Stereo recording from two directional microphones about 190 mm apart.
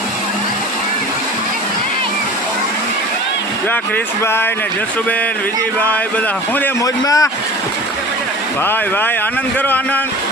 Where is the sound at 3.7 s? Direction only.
10° left (ahead or behind).